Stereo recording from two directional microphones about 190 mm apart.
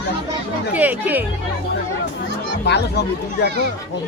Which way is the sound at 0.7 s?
10° right (ahead or behind).